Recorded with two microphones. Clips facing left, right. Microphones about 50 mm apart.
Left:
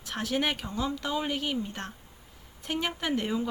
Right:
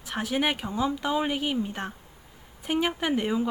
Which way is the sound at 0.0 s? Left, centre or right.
Centre.